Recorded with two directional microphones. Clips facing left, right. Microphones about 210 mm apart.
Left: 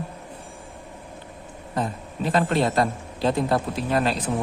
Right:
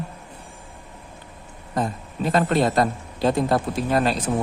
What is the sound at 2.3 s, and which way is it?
A man's voice, 45° right (ahead or behind).